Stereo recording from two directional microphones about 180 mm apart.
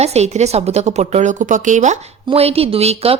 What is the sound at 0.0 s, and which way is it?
A woman's voice, 35° right (ahead or behind).